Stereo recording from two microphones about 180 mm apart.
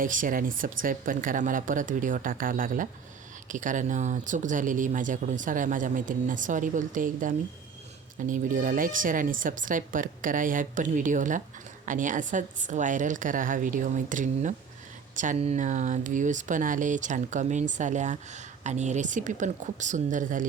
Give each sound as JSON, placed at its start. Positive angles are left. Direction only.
{"t": 0.0, "sound": "speech", "side_deg": -50}